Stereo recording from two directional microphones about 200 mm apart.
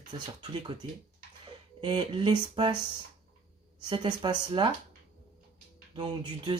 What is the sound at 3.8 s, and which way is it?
Speech, 25° right (ahead or behind).